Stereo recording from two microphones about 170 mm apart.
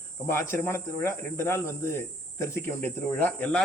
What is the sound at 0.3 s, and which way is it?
Speech, 15° left (ahead or behind).